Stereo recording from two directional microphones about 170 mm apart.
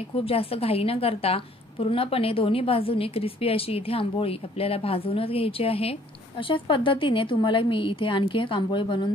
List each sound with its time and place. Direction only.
0.1 s a woman's voice: 35° left (ahead or behind)